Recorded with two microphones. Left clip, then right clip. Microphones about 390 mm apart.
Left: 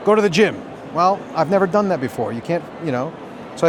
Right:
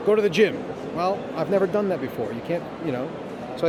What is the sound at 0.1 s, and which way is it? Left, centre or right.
Speech, left.